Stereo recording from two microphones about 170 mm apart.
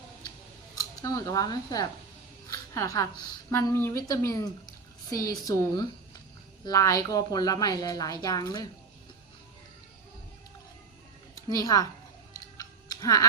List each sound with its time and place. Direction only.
0.8 s a woman's voice: 20° left (ahead or behind)
11.3 s a woman's voice: 20° left (ahead or behind)
12.3 s a sound: 20° left (ahead or behind)